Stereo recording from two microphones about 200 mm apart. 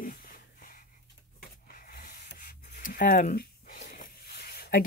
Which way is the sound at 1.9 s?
45° left (ahead or behind).